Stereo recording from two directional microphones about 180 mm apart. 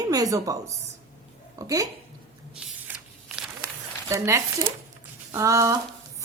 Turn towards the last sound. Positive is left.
turn(degrees=-20)  # may be behind; listen again after turning